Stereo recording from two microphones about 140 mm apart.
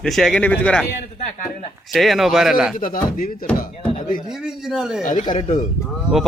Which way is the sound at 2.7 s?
85° left.